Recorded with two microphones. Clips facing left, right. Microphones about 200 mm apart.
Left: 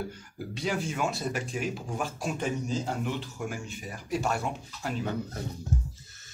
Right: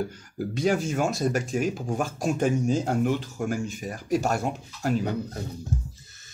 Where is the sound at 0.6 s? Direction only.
45° right (ahead or behind).